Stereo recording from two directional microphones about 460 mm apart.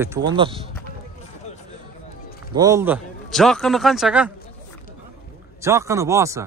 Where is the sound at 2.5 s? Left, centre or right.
Centre.